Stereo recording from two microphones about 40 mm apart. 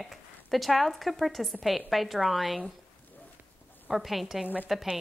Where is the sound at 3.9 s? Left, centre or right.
Centre.